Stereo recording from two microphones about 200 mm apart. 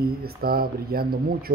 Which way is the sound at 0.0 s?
50° right (ahead or behind).